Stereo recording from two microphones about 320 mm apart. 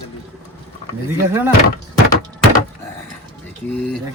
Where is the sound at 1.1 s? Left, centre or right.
Centre.